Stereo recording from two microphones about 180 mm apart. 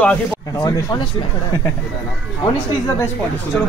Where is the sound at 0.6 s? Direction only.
20° left (ahead or behind).